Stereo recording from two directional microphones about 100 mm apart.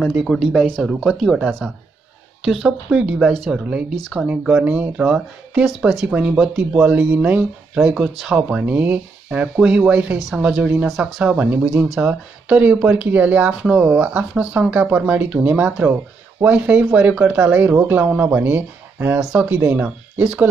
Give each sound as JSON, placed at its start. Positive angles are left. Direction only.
{"t": 0.2, "sound": "speech", "side_deg": 0}
{"t": 4.5, "sound": "speech", "side_deg": -10}
{"t": 11.7, "sound": "speech", "side_deg": -5}
{"t": 12.0, "sound": "speech", "side_deg": -15}
{"t": 19.1, "sound": "speech", "side_deg": -10}